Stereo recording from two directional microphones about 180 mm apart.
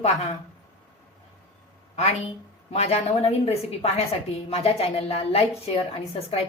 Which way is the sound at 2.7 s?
35° left (ahead or behind).